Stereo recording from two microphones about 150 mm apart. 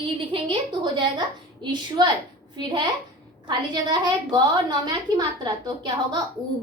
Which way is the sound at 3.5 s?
30° right (ahead or behind).